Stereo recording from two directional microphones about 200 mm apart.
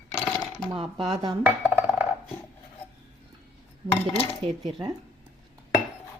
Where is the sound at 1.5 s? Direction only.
10° right (ahead or behind).